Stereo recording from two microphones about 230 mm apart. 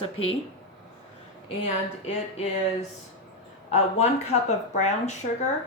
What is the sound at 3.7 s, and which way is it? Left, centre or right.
Speech, left.